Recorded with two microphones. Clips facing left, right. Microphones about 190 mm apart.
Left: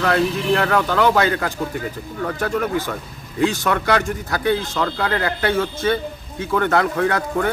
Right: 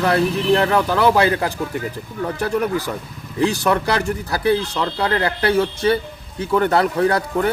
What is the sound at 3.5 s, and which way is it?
Speech, 35° right (ahead or behind).